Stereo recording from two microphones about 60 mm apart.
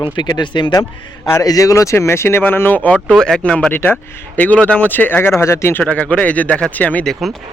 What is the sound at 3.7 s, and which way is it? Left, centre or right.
Speech, left.